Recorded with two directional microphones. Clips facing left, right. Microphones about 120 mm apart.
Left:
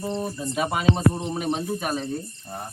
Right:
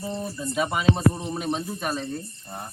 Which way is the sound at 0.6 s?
45° left (ahead or behind).